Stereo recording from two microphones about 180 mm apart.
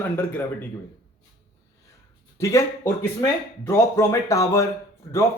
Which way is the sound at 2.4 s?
15° left (ahead or behind).